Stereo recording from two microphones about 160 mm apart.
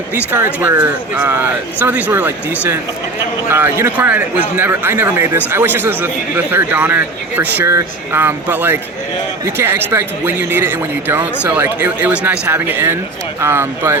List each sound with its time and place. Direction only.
0.3 s speech: 10° right (ahead or behind)